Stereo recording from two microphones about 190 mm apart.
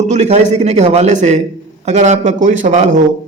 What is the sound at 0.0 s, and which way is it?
A man's voice, 35° right (ahead or behind).